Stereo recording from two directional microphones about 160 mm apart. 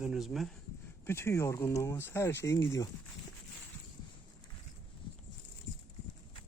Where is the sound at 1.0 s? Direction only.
15° left (ahead or behind).